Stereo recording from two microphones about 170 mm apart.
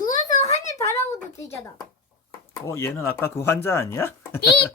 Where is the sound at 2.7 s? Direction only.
15° left (ahead or behind).